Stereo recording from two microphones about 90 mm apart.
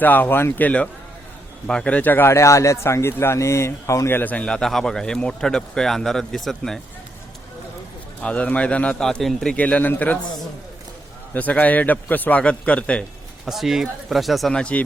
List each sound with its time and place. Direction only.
0.0 s a man's voice: 20° left (ahead or behind)
1.6 s a man's voice: 10° left (ahead or behind)
8.2 s a man's voice: 15° left (ahead or behind)
11.3 s a man's voice: 15° left (ahead or behind)
13.4 s speech: centre (ahead or behind)